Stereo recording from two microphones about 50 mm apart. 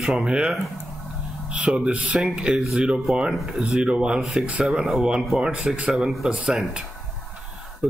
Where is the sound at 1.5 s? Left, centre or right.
Right.